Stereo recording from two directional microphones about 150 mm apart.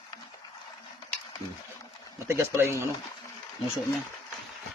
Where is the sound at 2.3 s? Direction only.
15° right (ahead or behind).